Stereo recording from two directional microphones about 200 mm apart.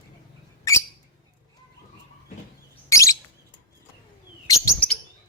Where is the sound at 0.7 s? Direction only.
15° left (ahead or behind).